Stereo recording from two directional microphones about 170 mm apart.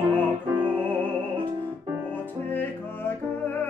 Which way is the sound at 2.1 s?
10° left (ahead or behind).